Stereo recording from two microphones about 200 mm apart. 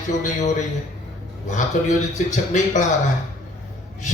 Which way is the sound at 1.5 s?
40° left (ahead or behind).